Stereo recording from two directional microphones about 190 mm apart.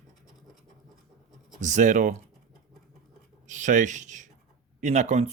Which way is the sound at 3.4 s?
40° right (ahead or behind).